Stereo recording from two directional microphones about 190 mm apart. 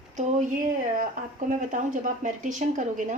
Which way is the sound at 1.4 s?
40° right (ahead or behind).